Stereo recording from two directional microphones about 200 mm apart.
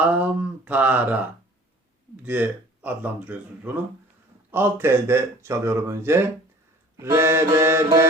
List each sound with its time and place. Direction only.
0.0 s speech: 5° right (ahead or behind)
2.2 s speech: 10° right (ahead or behind)